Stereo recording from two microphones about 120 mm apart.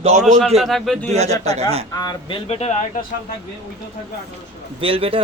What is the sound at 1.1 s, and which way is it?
Speech, 65° right (ahead or behind).